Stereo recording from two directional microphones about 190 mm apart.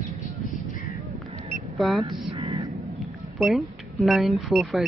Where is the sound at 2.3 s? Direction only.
30° right (ahead or behind).